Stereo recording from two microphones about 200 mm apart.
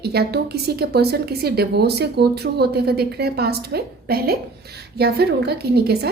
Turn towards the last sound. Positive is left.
turn(degrees=-50)  # may be behind; listen again after turning